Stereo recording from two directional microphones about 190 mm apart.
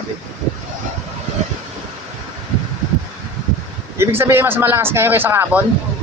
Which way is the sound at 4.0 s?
10° right (ahead or behind).